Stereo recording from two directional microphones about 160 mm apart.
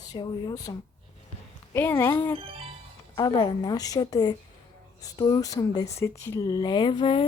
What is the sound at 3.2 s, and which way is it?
Speech, 25° left (ahead or behind).